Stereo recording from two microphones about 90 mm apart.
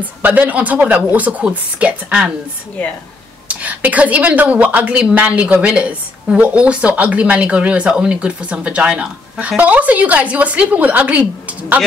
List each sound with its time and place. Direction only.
0.0 s a woman's voice: 20° right (ahead or behind)
3.6 s a woman's voice: 15° right (ahead or behind)